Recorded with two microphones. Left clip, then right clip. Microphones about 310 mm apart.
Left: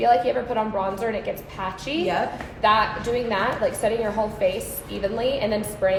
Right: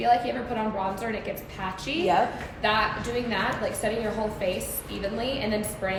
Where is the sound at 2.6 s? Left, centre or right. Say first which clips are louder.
Left 5 dB; left.